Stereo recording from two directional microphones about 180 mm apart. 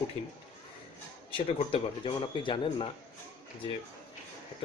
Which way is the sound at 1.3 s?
30° left (ahead or behind).